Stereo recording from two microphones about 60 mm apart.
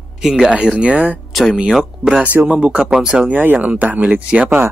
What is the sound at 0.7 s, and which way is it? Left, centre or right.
Speech, right.